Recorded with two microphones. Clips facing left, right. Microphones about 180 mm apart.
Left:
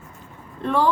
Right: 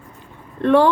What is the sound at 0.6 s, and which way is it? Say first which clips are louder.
Speech: right 8 dB; 70° right (ahead or behind).